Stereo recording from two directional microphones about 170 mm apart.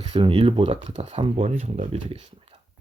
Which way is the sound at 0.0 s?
30° right (ahead or behind).